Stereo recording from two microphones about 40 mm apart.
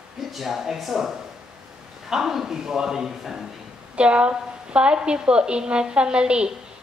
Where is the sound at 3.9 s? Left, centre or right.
Right.